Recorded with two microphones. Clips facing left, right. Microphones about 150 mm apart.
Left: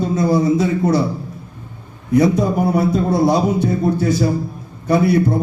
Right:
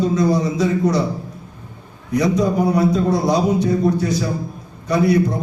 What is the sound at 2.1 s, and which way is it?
Speech, 55° left (ahead or behind).